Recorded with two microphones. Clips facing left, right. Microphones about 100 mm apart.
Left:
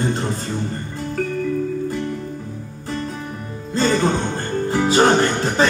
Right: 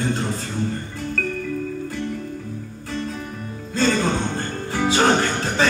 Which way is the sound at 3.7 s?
20° left (ahead or behind).